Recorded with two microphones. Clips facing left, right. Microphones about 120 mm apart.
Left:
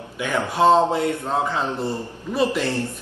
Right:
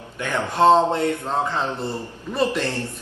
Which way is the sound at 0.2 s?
5° left (ahead or behind).